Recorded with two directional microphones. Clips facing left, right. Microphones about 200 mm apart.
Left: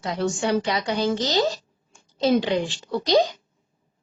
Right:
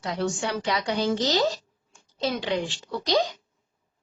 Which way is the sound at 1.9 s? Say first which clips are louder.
Left 8 dB; 25° left (ahead or behind).